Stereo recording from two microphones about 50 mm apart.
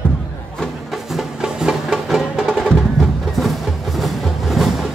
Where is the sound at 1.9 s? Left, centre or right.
Centre.